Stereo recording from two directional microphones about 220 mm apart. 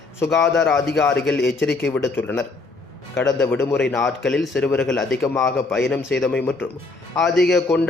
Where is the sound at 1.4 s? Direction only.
50° left (ahead or behind).